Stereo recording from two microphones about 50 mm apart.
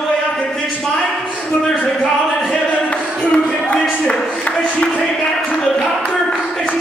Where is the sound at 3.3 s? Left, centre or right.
Left.